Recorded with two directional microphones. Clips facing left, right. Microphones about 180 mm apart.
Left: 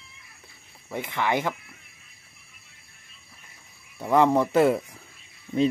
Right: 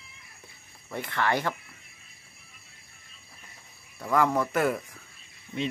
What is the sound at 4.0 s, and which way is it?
Speech, 25° left (ahead or behind).